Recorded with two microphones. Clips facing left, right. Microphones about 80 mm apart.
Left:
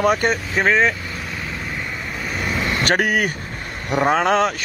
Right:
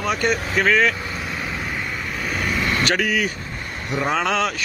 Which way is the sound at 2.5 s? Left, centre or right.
Left.